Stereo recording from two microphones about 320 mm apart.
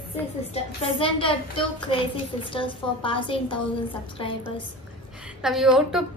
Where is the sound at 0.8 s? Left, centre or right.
Centre.